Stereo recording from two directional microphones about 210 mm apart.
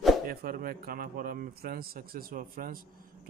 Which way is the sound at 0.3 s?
45° right (ahead or behind).